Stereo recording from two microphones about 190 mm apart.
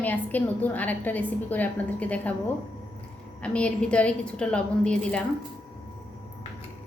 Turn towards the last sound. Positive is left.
turn(degrees=5)  # may be behind; listen again after turning